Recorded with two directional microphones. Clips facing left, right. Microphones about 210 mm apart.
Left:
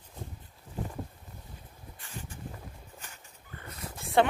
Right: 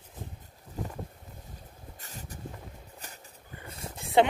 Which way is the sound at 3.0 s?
35° right (ahead or behind).